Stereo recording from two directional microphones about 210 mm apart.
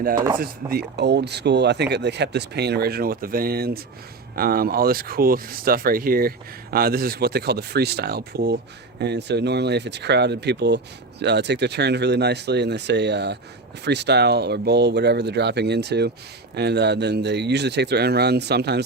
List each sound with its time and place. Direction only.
0.3 s speech: 45° right (ahead or behind)